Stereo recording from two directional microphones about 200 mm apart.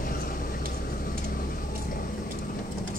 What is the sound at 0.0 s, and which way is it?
Vehicle, 45° left (ahead or behind).